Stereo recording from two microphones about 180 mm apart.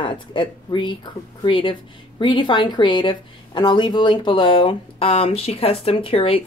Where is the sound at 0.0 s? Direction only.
25° left (ahead or behind).